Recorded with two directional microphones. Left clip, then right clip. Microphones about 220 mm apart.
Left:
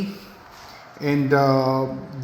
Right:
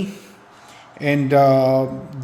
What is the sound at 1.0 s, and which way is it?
Mantra, 30° right (ahead or behind).